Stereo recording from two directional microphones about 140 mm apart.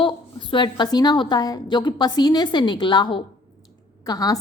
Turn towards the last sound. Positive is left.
turn(degrees=25)  # may be behind; listen again after turning